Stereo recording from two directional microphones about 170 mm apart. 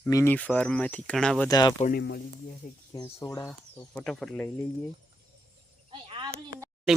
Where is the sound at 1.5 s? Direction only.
25° left (ahead or behind).